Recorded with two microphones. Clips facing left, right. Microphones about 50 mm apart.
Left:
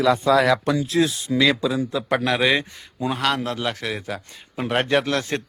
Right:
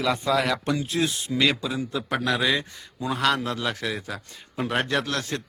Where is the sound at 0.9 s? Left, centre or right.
Left.